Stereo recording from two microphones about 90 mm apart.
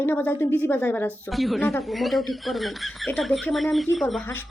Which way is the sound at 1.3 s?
Centre (ahead or behind).